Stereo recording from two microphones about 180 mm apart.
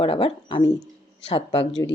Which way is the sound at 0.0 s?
30° left (ahead or behind).